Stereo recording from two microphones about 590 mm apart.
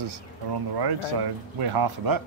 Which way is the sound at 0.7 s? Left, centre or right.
Right.